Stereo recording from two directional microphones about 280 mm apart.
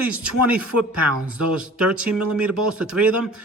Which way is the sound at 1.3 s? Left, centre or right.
Centre.